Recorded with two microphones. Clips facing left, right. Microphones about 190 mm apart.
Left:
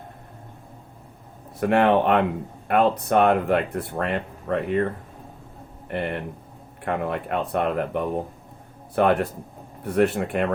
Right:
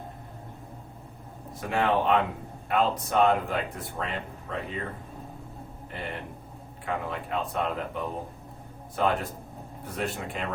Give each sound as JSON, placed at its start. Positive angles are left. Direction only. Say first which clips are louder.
{"t": 1.6, "sound": "speech", "louder": "left 7 dB", "side_deg": 65}
{"t": 5.9, "sound": "speech", "louder": "left 9 dB", "side_deg": 65}